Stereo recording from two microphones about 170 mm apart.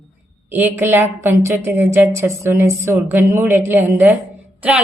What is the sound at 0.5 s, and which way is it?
A woman's voice, 10° right (ahead or behind).